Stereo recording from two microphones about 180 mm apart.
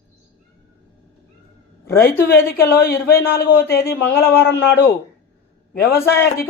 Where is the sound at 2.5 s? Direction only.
60° left (ahead or behind).